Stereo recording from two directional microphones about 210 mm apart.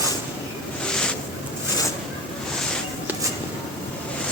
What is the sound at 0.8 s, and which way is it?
Boat, 5° left (ahead or behind).